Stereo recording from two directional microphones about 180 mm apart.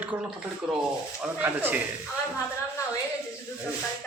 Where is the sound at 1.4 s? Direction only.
10° right (ahead or behind).